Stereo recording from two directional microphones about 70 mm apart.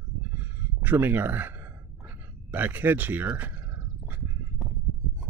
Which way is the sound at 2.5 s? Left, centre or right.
Right.